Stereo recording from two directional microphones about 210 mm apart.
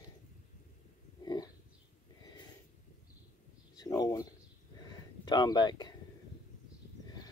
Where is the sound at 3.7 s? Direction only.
20° left (ahead or behind).